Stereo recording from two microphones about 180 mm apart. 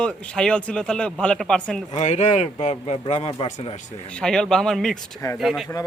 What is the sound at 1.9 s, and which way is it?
A man's voice, 40° left (ahead or behind).